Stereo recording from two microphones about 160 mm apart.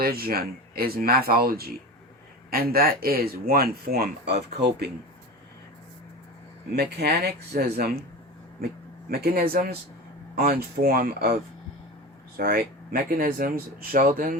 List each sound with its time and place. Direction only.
0.0 s speech: 70° right (ahead or behind); by 4.9 s 90° right
6.7 s speech: 90° right
9.0 s speech: 70° right (ahead or behind)
12.4 s speech: 70° right (ahead or behind)